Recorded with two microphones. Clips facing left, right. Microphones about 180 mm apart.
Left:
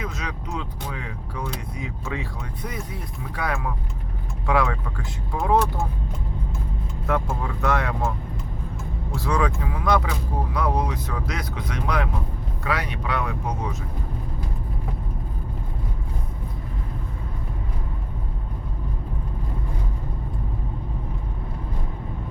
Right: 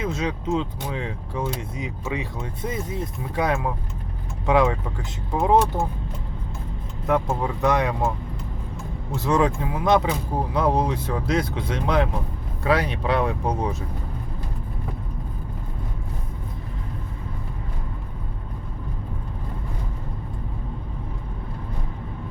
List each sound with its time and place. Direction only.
0.0 s speech: 25° right (ahead or behind)
7.1 s speech: 20° right (ahead or behind)
9.1 s speech: 20° right (ahead or behind)